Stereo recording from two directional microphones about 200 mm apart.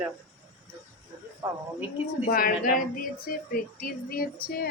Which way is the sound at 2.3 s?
45° left (ahead or behind).